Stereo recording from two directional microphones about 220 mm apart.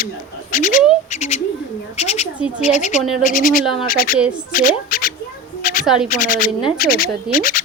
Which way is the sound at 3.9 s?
40° left (ahead or behind).